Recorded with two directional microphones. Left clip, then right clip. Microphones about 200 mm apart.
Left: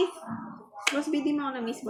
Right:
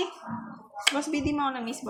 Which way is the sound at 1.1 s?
40° right (ahead or behind).